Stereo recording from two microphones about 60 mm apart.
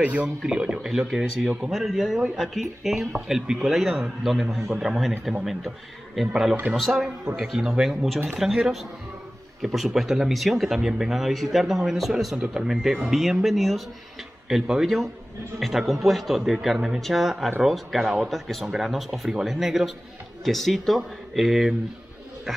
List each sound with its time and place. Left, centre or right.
0.0 s speech: right
0.4 s speech: centre